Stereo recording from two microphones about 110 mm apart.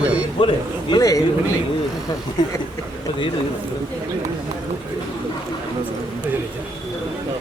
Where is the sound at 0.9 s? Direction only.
35° left (ahead or behind).